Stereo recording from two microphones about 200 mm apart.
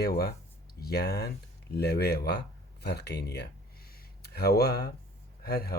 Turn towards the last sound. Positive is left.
turn(degrees=50)  # may be behind; listen again after turning